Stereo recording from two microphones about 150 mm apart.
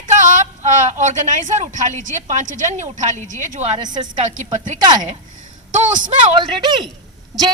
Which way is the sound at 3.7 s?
30° right (ahead or behind).